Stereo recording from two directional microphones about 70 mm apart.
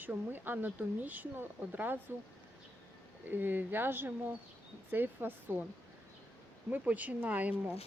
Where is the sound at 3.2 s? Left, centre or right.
Right.